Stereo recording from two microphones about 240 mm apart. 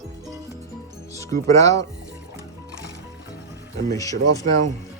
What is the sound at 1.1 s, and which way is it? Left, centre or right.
Speech, centre.